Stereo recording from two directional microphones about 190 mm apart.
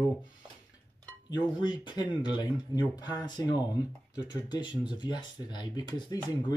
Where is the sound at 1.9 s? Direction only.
25° left (ahead or behind).